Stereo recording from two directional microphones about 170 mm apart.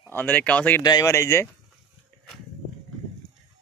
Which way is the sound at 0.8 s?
25° left (ahead or behind).